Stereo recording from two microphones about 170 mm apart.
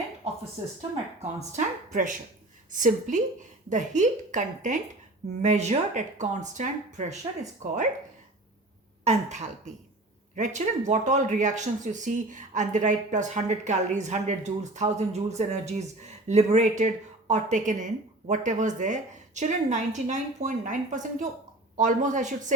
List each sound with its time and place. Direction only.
1.4 s speech: 45° right (ahead or behind)
9.0 s a woman's voice: 40° right (ahead or behind)